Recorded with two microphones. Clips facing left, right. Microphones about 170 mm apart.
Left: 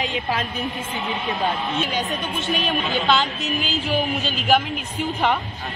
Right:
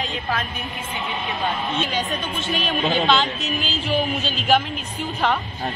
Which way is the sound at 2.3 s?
15° left (ahead or behind).